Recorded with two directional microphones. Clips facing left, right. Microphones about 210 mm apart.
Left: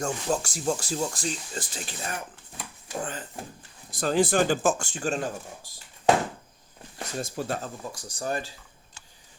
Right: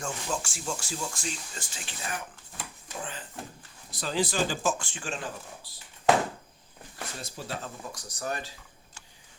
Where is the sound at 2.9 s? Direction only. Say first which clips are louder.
Left 7 dB; 45° left (ahead or behind).